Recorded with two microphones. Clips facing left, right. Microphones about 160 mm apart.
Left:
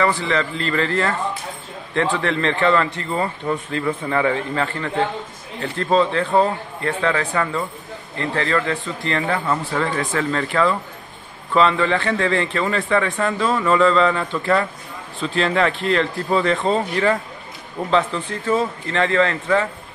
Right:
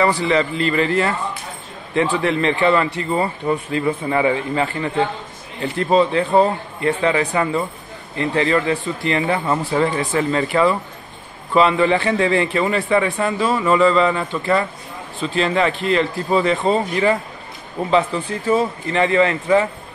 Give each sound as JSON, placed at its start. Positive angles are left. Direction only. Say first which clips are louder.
{"t": 0.0, "sound": "a man's voice", "louder": "right 3 dB", "side_deg": -15}